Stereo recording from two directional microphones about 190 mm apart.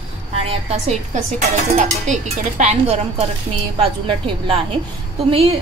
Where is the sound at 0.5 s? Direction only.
35° right (ahead or behind).